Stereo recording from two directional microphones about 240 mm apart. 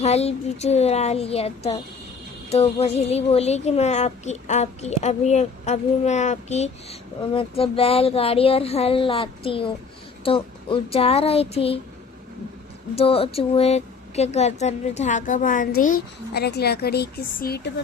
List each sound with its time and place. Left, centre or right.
0.0 s a woman's voice: left
13.0 s speech: left